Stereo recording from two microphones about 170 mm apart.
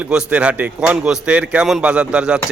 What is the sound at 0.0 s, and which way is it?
A man's voice, 5° right (ahead or behind).